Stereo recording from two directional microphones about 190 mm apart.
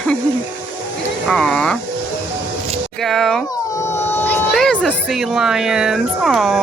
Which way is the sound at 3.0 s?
Centre (ahead or behind).